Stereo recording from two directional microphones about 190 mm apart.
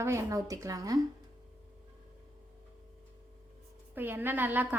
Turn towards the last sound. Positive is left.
turn(degrees=-10)  # may be behind; listen again after turning